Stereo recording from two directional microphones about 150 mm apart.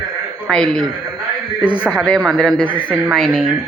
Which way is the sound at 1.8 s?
5° right (ahead or behind).